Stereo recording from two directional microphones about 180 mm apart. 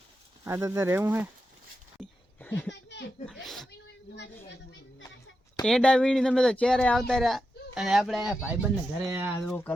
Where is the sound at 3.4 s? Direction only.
Centre (ahead or behind).